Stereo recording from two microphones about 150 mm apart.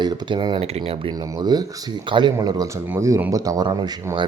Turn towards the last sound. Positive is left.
turn(degrees=-30)  # may be behind; listen again after turning